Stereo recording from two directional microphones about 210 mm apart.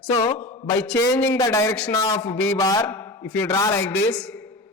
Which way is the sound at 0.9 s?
10° left (ahead or behind).